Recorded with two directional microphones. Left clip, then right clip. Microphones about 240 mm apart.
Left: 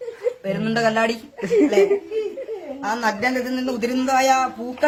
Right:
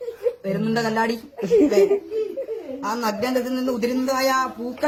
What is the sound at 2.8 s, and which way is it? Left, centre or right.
A man's voice, centre.